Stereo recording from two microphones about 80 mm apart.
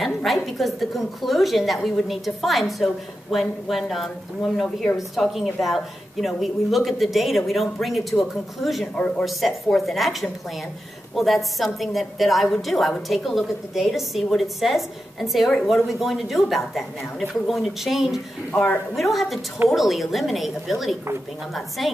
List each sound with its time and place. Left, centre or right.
0.0 s a woman's voice: centre
8.9 s speech: centre
9.2 s a woman's voice: centre
18.5 s a man's voice: left
18.9 s a woman's voice: centre